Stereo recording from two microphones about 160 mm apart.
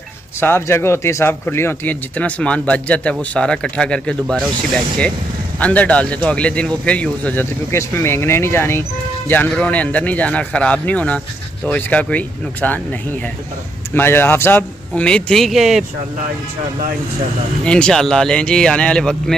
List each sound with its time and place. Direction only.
0.4 s speech: 15° left (ahead or behind)
5.6 s speech: 10° left (ahead or behind)
13.9 s speech: 15° left (ahead or behind); by 15.8 s centre (ahead or behind)
17.6 s speech: 5° left (ahead or behind)